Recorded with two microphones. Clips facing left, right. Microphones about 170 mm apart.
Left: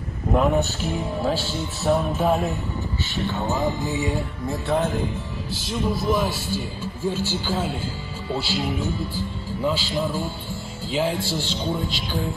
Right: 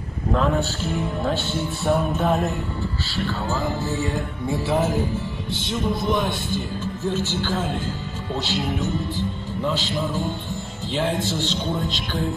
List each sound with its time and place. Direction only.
0.3 s speech: 15° left (ahead or behind)
1.2 s speech: 5° left (ahead or behind)
3.3 s speech: 20° left (ahead or behind)
4.5 s speech: 5° right (ahead or behind)